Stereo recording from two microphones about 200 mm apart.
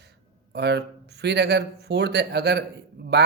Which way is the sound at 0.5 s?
55° right (ahead or behind).